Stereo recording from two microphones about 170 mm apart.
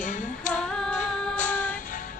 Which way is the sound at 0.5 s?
5° left (ahead or behind).